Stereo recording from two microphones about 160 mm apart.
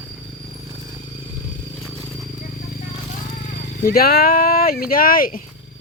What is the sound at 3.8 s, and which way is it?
Speech, 70° left (ahead or behind).